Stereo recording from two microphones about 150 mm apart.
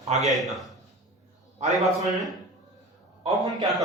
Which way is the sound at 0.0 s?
50° right (ahead or behind).